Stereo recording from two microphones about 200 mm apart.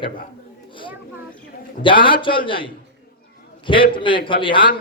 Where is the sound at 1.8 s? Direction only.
25° left (ahead or behind).